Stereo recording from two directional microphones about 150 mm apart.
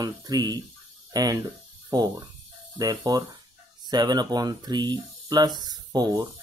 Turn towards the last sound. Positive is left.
turn(degrees=-25)  # may be behind; listen again after turning